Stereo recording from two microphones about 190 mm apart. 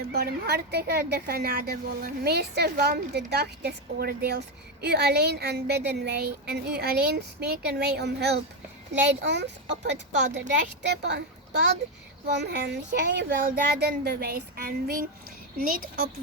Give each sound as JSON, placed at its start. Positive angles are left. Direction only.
{"t": 0.0, "sound": "speech", "side_deg": -55}